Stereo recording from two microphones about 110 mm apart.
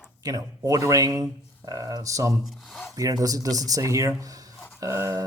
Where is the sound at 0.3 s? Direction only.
35° right (ahead or behind).